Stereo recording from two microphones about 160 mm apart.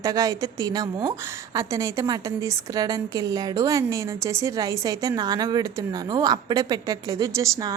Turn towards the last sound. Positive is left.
turn(degrees=-20)  # may be behind; listen again after turning